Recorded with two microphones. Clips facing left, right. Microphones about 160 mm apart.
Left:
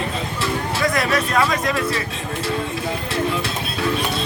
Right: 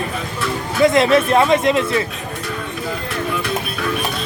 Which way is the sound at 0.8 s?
25° right (ahead or behind).